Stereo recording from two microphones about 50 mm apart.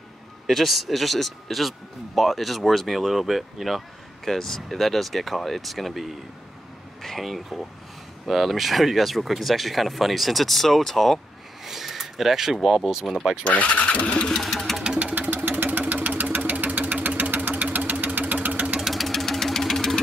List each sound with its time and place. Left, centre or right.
0.5 s speech: centre
11.6 s a sound: centre
12.6 s speech: centre
13.4 s speech: left
14.4 s engine: centre
15.1 s engine: right
18.8 s engine knocking: centre